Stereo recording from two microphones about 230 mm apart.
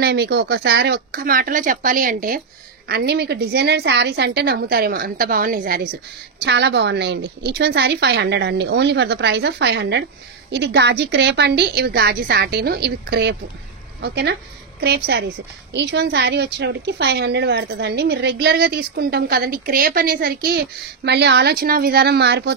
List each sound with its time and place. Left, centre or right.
0.0 s a woman's voice: right
6.4 s a woman's voice: right